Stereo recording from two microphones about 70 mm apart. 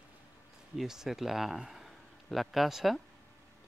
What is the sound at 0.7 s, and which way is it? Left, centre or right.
Speech, centre.